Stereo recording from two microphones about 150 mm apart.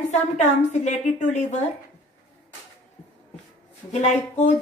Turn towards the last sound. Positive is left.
turn(degrees=50)  # may be behind; listen again after turning